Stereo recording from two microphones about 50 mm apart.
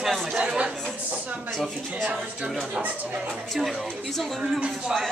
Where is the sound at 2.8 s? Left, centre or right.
Right.